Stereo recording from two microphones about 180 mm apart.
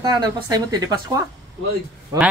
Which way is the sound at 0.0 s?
20° right (ahead or behind).